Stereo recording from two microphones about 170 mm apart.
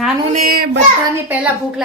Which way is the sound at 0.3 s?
60° right (ahead or behind).